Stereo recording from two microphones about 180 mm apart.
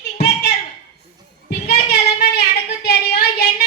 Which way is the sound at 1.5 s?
60° left (ahead or behind).